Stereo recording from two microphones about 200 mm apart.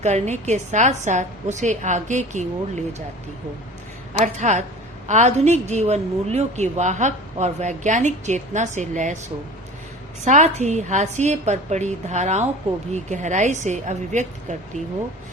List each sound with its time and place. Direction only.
0.0 s a woman's voice: 35° right (ahead or behind)
4.2 s a woman's voice: 35° right (ahead or behind)
10.2 s a woman's voice: 35° right (ahead or behind)